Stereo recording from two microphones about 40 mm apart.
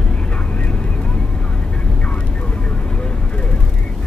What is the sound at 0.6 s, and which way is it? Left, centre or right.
Vehicle, left.